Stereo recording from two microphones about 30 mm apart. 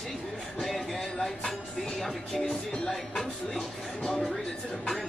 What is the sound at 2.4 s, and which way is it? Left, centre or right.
Music, centre.